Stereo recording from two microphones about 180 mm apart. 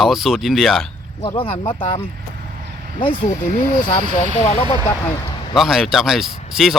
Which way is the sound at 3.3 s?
45° left (ahead or behind).